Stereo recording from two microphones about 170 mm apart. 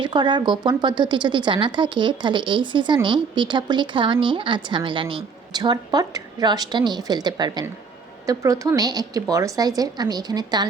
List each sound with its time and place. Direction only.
0.0 s a woman's voice: 25° right (ahead or behind)